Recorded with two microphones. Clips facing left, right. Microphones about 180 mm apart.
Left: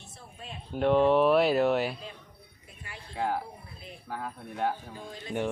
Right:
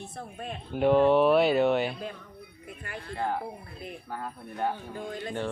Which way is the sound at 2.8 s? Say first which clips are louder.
Right 7 dB; 55° right (ahead or behind).